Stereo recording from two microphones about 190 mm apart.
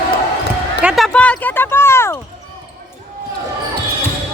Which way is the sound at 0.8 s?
Centre (ahead or behind).